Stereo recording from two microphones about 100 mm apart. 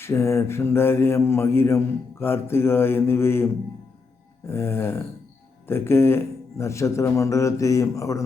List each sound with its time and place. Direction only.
0.0 s mantra: 25° left (ahead or behind)